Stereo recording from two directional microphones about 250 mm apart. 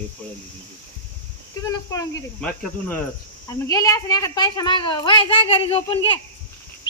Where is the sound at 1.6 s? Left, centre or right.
Centre.